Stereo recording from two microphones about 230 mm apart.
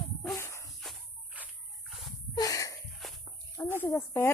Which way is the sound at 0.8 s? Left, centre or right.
Centre.